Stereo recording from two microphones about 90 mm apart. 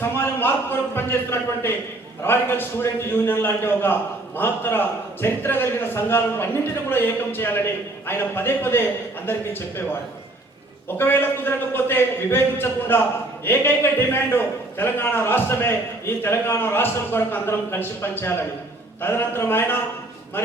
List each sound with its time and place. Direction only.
0.0 s a man's voice: 25° left (ahead or behind)
10.9 s a man's voice: 25° left (ahead or behind)